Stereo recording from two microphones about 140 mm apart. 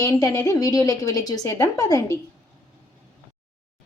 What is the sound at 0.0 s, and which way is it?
A woman's voice, 25° left (ahead or behind).